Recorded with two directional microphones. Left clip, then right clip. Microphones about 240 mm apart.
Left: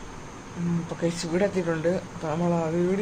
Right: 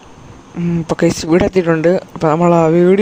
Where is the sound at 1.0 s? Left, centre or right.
Right.